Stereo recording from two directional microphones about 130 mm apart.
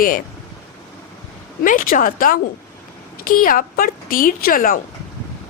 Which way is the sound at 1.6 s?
90° left.